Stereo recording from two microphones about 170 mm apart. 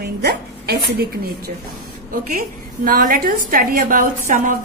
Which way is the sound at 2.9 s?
55° right (ahead or behind).